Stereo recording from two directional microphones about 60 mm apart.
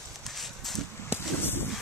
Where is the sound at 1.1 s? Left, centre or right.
Right.